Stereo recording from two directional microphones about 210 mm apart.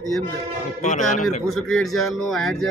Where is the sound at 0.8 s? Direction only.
35° left (ahead or behind).